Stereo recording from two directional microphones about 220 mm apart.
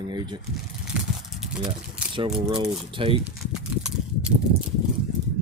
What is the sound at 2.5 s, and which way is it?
Speech, 25° right (ahead or behind).